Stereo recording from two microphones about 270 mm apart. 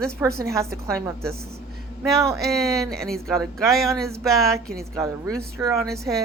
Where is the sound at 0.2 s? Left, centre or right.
Centre.